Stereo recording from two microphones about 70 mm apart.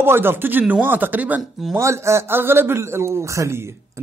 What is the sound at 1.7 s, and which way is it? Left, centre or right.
Speech, right.